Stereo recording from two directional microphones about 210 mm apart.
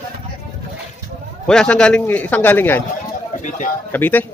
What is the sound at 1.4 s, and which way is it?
A man's voice, 5° left (ahead or behind).